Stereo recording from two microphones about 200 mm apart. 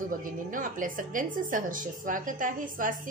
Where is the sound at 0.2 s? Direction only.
40° right (ahead or behind).